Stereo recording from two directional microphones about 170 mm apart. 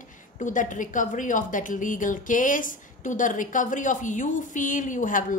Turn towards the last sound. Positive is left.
turn(degrees=50)  # may be behind; listen again after turning